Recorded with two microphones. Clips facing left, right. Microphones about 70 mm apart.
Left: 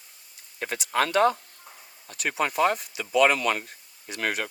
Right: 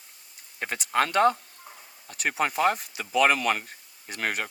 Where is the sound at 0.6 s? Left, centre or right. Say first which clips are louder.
Even; right.